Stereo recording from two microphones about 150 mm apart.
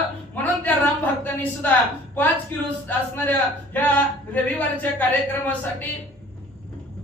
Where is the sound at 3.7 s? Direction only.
10° left (ahead or behind).